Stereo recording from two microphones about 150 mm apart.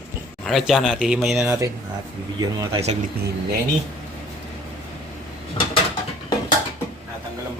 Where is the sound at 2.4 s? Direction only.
25° right (ahead or behind).